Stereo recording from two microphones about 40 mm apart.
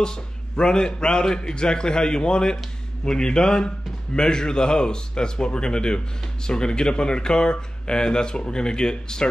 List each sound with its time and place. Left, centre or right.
0.0 s speech: left